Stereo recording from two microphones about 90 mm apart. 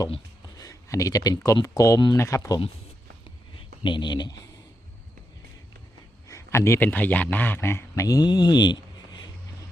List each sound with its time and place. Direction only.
0.4 s a sound: 40° left (ahead or behind)
1.6 s speech: 40° left (ahead or behind)
3.8 s speech: 60° left (ahead or behind)
6.2 s a man's voice: 35° left (ahead or behind)
8.0 s speech: 45° left (ahead or behind)